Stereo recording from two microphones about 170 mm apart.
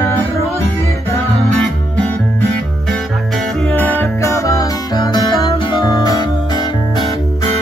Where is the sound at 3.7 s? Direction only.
10° left (ahead or behind).